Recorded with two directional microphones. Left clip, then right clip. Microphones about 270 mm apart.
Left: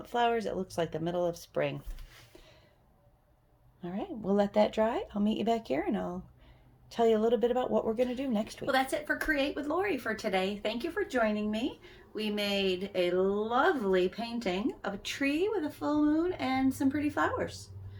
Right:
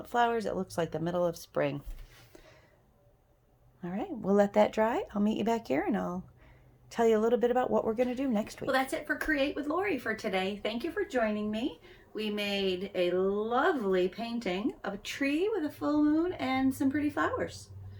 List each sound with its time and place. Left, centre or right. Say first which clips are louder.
0.0 s speech: right 1 dB; centre
3.8 s speech: right 1 dB; centre
8.6 s speech: left 1 dB; centre